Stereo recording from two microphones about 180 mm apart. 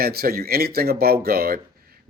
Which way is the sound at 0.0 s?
60° right (ahead or behind).